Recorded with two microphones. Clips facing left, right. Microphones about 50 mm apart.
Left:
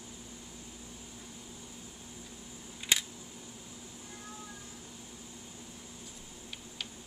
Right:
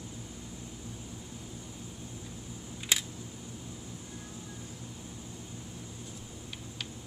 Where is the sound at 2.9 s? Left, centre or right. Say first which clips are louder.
Left 1 dB; centre.